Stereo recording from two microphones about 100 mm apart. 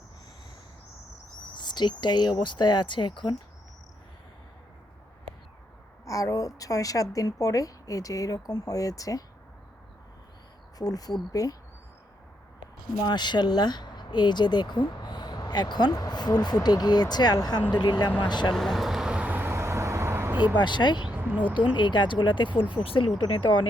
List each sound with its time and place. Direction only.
1.5 s speech: 50° left (ahead or behind)
6.1 s speech: 35° left (ahead or behind)
10.8 s speech: 40° left (ahead or behind)
13.0 s speech: 45° left (ahead or behind)
18.5 s vehicle: centre (ahead or behind); by 20.6 s 15° right (ahead or behind)
20.6 s speech: 50° left (ahead or behind)
21.2 s speech: 20° right (ahead or behind)
21.5 s speech: 55° left (ahead or behind)
22.7 s speech: 65° left (ahead or behind)